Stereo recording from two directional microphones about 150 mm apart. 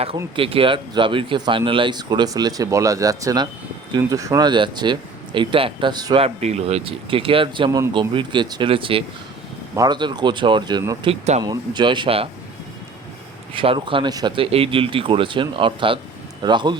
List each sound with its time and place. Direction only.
0.3 s speech: 35° right (ahead or behind)
6.2 s speech: 45° right (ahead or behind)
13.5 s speech: 35° right (ahead or behind)